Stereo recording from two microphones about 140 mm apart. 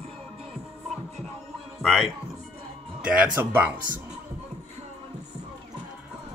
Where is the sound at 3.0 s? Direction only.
10° right (ahead or behind).